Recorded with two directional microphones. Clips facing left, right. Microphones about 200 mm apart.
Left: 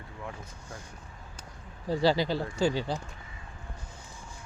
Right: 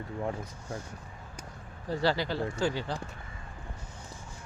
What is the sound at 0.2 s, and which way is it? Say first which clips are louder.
Speech: right 7 dB; 40° right (ahead or behind).